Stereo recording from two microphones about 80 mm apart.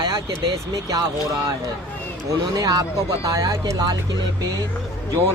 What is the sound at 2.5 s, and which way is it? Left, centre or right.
Speech, right.